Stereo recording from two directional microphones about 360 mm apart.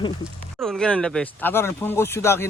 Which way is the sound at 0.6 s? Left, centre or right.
Centre.